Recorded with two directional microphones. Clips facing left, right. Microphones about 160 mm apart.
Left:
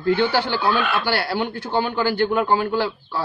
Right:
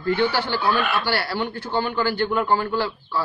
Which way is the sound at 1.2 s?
20° left (ahead or behind).